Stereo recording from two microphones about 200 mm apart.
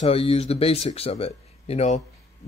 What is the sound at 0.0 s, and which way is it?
Speech, 30° left (ahead or behind).